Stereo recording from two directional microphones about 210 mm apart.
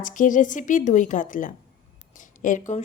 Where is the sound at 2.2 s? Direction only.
40° left (ahead or behind).